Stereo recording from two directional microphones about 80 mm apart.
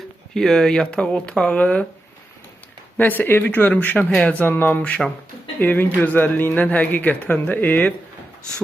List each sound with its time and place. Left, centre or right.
0.3 s speech: centre
3.0 s speech: left